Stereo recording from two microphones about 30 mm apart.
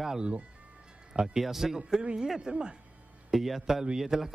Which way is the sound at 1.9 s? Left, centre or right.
Right.